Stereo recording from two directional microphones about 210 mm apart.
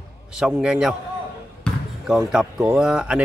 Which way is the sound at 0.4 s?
5° right (ahead or behind).